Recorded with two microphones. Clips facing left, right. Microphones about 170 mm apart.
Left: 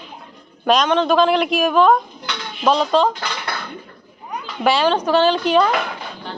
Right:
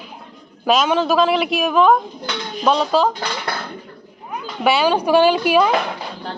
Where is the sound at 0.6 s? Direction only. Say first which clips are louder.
Even; 5° right (ahead or behind).